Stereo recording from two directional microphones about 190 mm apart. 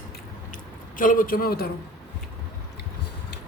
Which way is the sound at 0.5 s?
45° left (ahead or behind).